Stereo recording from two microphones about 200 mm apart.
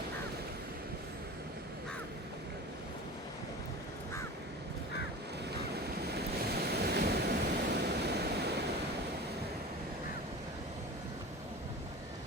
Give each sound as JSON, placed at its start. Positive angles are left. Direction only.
{"t": 5.5, "sound": "waves", "side_deg": -55}